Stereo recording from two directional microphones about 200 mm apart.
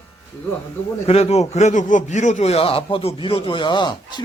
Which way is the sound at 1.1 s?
30° left (ahead or behind).